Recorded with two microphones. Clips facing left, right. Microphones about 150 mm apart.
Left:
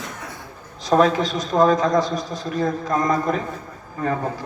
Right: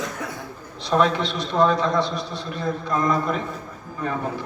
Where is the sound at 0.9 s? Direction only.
40° left (ahead or behind).